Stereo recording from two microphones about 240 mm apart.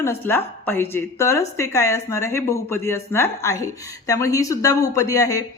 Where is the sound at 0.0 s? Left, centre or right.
Centre.